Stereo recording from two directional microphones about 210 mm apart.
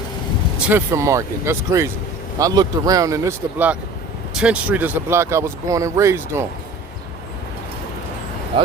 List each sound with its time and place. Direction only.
0.7 s speech: 15° right (ahead or behind)